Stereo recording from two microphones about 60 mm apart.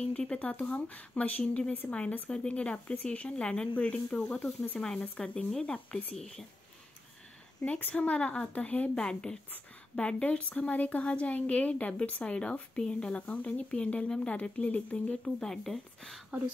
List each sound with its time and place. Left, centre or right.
0.1 s a woman's voice: centre
1.4 s a woman's voice: centre
5.0 s a woman's voice: left
6.1 s a woman's voice: centre
7.9 s a woman's voice: left
8.9 s a woman's voice: centre
15.2 s a woman's voice: centre